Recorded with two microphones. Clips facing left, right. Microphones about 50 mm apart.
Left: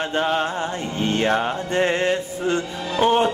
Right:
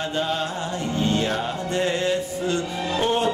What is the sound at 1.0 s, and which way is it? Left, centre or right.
Music, left.